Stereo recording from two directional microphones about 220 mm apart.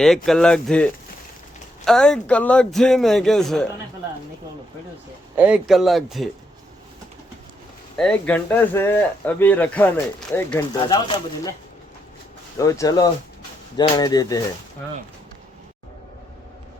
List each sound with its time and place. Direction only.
0.0 s speech: centre (ahead or behind)
5.4 s speech: 5° right (ahead or behind)
7.9 s speech: 5° left (ahead or behind)
10.8 s speech: 20° left (ahead or behind)
12.5 s speech: 15° left (ahead or behind)